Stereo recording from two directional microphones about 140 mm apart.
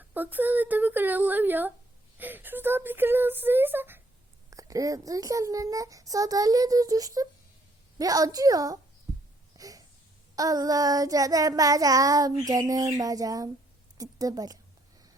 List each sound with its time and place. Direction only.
0.1 s speech: 15° right (ahead or behind)
4.5 s child singing: 25° right (ahead or behind)
9.6 s a sound: 25° right (ahead or behind)
10.3 s child singing: 25° right (ahead or behind)
14.0 s a woman's voice: 25° right (ahead or behind)